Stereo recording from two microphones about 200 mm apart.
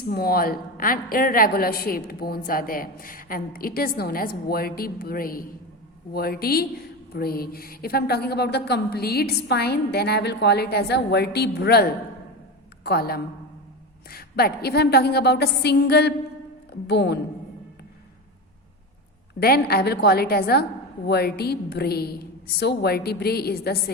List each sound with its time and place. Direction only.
0.0 s a woman's voice: 50° left (ahead or behind)
19.4 s a woman's voice: 50° left (ahead or behind)